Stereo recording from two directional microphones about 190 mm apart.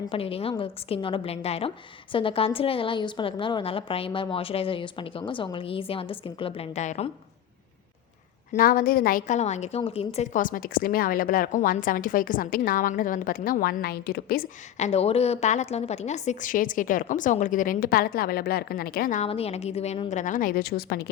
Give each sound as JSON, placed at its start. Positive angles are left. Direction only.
{"t": 0.1, "sound": "a woman's voice", "side_deg": 30}
{"t": 8.5, "sound": "a woman's voice", "side_deg": 50}
{"t": 14.8, "sound": "a woman's voice", "side_deg": 35}
{"t": 19.2, "sound": "a woman's voice", "side_deg": 30}